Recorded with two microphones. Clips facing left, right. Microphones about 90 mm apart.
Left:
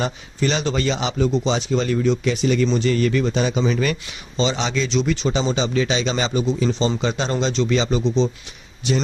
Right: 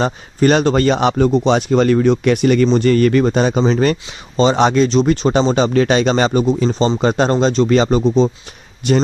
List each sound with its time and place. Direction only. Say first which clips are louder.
0.0 s speech: right 8 dB; 50° right (ahead or behind)